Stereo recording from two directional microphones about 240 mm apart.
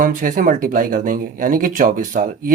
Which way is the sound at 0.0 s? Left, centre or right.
Right.